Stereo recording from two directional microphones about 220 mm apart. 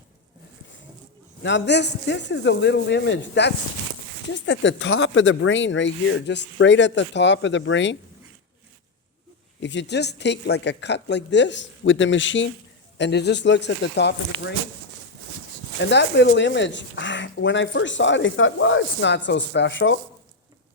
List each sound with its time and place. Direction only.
1.4 s speech: 55° left (ahead or behind)
9.6 s speech: 55° left (ahead or behind)
15.8 s speech: 50° left (ahead or behind)